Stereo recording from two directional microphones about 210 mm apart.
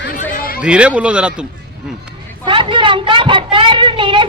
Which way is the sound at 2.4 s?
25° right (ahead or behind).